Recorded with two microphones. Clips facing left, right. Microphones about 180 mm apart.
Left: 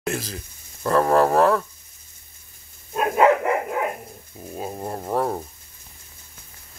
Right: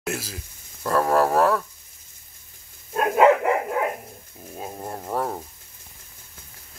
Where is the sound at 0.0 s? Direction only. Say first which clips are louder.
Left 3 dB; 5° right (ahead or behind).